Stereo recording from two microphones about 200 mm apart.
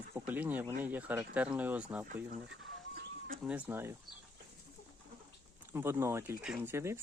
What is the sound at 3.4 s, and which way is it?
Speech, 10° right (ahead or behind).